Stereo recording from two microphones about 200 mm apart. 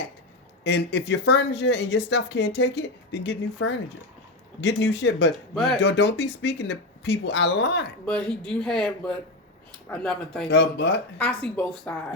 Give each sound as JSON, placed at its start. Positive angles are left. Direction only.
{"t": 0.6, "sound": "speech", "side_deg": 60}
{"t": 8.0, "sound": "speech", "side_deg": 5}
{"t": 10.5, "sound": "speech", "side_deg": 55}
{"t": 11.2, "sound": "speech", "side_deg": 5}